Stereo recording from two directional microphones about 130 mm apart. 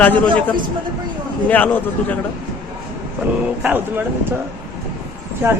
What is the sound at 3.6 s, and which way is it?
Speech, 15° right (ahead or behind).